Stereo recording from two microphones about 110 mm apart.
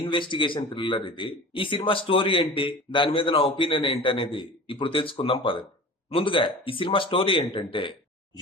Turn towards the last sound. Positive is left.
turn(degrees=50)  # may be behind; listen again after turning